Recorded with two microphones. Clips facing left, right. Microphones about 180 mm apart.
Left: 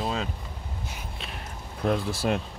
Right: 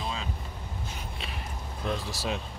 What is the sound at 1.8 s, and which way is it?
Speech, 55° left (ahead or behind).